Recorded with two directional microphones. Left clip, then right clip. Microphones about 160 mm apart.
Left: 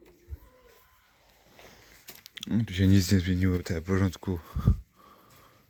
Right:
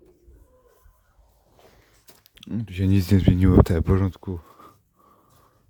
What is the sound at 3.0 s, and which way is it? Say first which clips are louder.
Speech: right 7 dB; 35° right (ahead or behind).